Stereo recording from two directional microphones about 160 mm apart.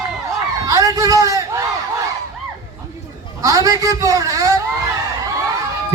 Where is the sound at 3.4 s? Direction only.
20° right (ahead or behind).